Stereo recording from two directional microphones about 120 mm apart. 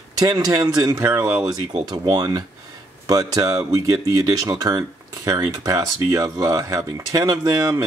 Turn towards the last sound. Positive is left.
turn(degrees=-30)  # may be behind; listen again after turning